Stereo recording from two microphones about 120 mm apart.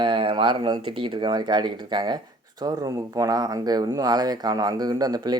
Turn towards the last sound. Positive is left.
turn(degrees=-30)  # may be behind; listen again after turning